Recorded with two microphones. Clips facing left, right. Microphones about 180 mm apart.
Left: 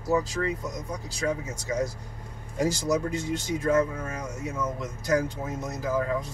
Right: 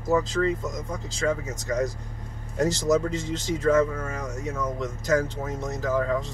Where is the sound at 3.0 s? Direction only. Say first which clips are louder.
Right 2 dB; 10° left (ahead or behind).